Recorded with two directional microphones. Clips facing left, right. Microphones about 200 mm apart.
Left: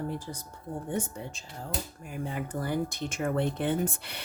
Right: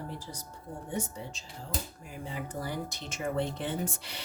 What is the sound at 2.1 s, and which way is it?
Speech, 55° left (ahead or behind).